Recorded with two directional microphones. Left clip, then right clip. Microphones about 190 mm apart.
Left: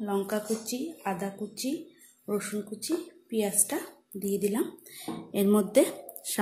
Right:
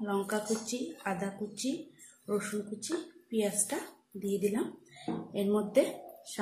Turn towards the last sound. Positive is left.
turn(degrees=50)  # may be behind; listen again after turning